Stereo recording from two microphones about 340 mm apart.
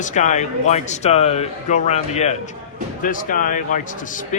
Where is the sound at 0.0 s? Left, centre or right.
Left.